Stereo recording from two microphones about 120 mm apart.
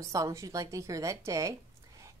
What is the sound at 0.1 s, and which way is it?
A woman's voice, 25° right (ahead or behind).